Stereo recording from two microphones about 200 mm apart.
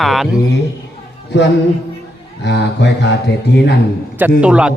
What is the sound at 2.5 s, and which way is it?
Speech, 60° left (ahead or behind).